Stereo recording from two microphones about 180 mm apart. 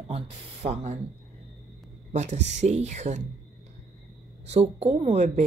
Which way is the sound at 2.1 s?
40° right (ahead or behind).